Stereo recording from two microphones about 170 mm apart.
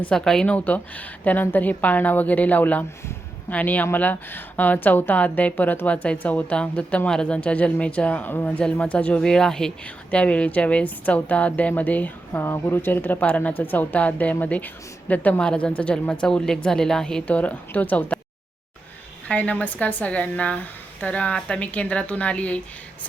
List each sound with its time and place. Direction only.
0.0 s speech: 5° left (ahead or behind)
19.3 s speech: 10° left (ahead or behind)